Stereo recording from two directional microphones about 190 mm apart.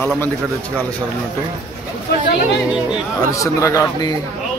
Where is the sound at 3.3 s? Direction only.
15° left (ahead or behind).